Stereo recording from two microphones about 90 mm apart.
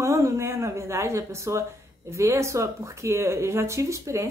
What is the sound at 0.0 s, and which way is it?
Speech, 35° right (ahead or behind).